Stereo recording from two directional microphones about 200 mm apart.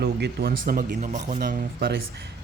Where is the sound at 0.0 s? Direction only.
55° right (ahead or behind).